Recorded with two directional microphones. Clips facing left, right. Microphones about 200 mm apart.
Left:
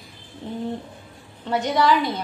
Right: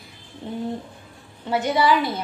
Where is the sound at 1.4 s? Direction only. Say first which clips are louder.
Even; 5° right (ahead or behind).